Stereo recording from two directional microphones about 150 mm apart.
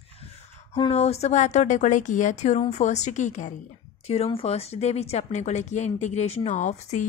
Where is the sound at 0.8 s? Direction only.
45° left (ahead or behind).